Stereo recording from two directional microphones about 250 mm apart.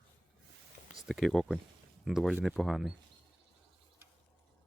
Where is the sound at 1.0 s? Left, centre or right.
Centre.